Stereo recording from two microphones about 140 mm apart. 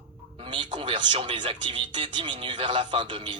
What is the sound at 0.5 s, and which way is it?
Speech, 35° right (ahead or behind).